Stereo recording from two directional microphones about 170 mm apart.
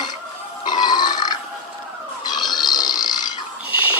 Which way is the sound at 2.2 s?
25° left (ahead or behind).